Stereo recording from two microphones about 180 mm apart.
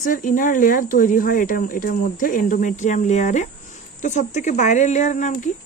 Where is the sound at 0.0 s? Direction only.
45° left (ahead or behind).